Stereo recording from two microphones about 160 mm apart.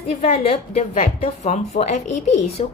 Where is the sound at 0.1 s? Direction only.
40° left (ahead or behind).